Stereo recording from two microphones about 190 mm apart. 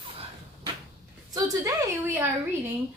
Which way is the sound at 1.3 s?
15° right (ahead or behind).